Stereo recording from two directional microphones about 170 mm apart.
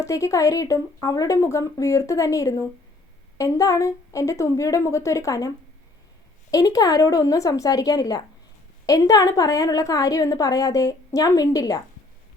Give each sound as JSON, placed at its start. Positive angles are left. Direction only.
{"t": 0.0, "sound": "a woman's voice", "side_deg": 15}
{"t": 6.5, "sound": "a woman's voice", "side_deg": 20}